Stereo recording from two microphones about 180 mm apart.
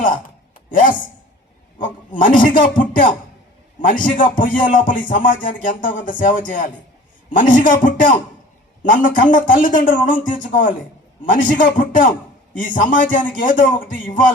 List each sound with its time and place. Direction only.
0.7 s a man's voice: 50° left (ahead or behind)
2.1 s a man's voice: 45° left (ahead or behind)